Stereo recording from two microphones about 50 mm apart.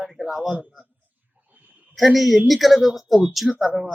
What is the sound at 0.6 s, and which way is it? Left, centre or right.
Speech, right.